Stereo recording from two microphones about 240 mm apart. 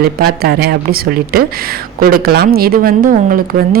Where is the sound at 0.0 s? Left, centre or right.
Right.